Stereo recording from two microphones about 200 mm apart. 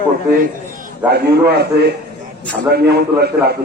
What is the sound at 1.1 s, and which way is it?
A man's voice, 55° right (ahead or behind).